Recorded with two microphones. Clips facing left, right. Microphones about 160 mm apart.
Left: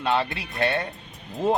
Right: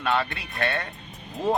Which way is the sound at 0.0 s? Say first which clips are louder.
Left 2 dB; 25° left (ahead or behind).